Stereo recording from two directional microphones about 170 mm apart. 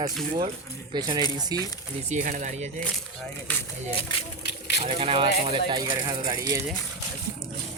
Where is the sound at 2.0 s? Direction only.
45° right (ahead or behind).